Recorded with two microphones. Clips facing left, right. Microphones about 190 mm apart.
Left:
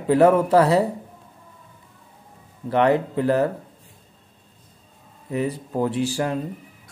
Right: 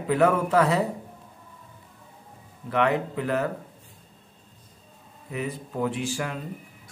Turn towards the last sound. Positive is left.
turn(degrees=35)  # may be behind; listen again after turning